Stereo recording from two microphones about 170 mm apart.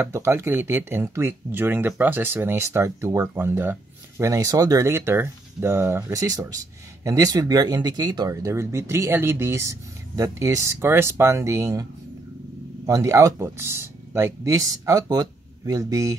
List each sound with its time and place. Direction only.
0.0 s speech: 15° right (ahead or behind)